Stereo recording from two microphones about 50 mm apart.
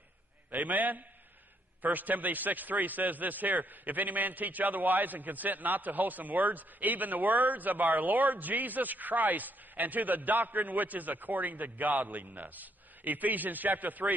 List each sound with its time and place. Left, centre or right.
0.5 s a man's voice: right